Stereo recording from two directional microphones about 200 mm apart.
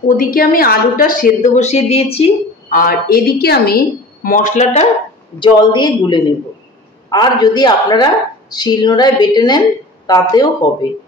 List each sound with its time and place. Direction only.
0.2 s a woman's voice: 45° left (ahead or behind); by 2.8 s 30° left (ahead or behind)
2.8 s a woman's voice: 45° left (ahead or behind)
5.4 s speech: 20° left (ahead or behind)